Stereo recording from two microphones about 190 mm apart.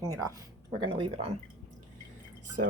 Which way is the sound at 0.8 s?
25° right (ahead or behind).